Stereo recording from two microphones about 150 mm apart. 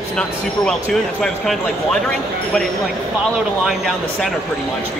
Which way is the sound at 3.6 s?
Centre (ahead or behind).